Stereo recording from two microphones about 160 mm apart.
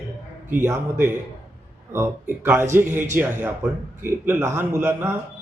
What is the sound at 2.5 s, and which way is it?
A man's voice, 15° right (ahead or behind).